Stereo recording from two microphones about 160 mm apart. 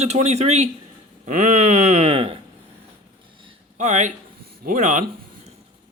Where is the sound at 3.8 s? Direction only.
50° right (ahead or behind).